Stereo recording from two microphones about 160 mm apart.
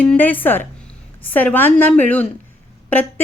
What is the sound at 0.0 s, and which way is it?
A woman's voice, 10° left (ahead or behind).